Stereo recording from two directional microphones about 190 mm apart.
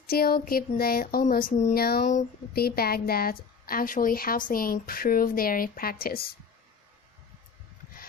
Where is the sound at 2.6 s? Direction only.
55° left (ahead or behind).